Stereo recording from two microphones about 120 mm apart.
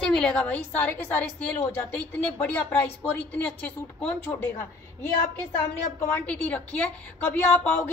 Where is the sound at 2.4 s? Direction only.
15° left (ahead or behind).